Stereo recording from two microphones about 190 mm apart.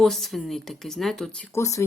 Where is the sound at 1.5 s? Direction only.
15° left (ahead or behind).